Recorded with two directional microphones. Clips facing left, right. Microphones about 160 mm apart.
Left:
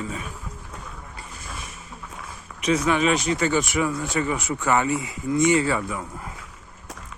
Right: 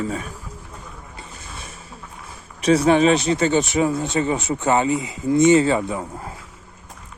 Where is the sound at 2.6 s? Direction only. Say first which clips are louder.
Right 6 dB; 35° right (ahead or behind).